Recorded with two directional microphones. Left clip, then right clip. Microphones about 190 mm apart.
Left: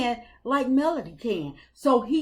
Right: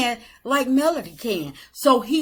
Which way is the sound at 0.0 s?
15° right (ahead or behind).